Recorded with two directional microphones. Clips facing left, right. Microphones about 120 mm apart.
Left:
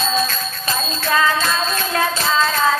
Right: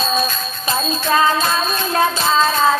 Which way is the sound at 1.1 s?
25° right (ahead or behind).